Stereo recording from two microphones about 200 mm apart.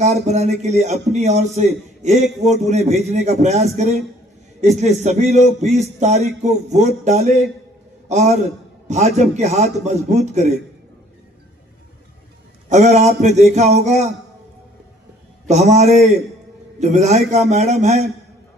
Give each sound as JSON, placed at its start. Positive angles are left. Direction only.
{"t": 0.0, "sound": "a man's voice", "side_deg": -35}
{"t": 12.6, "sound": "a man's voice", "side_deg": -35}
{"t": 15.4, "sound": "a man's voice", "side_deg": -35}